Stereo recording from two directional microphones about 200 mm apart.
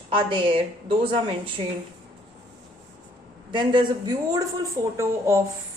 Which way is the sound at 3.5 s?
25° right (ahead or behind).